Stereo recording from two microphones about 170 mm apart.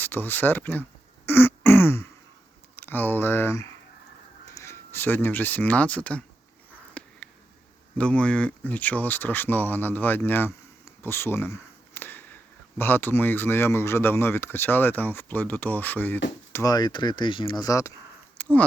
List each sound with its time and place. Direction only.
0.0 s speech: 10° left (ahead or behind)
1.3 s throat clearing: 10° left (ahead or behind)
2.7 s speech: 10° left (ahead or behind)
7.0 s a sound: 10° left (ahead or behind)
7.9 s speech: 5° left (ahead or behind)
18.4 s a sound: 10° left (ahead or behind)